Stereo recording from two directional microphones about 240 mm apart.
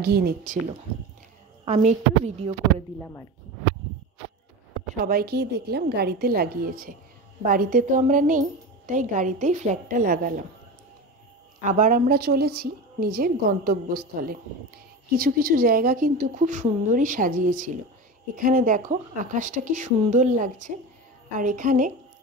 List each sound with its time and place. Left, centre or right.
0.0 s a woman's voice: right
1.6 s a woman's voice: right
5.0 s a woman's voice: right
11.6 s a woman's voice: right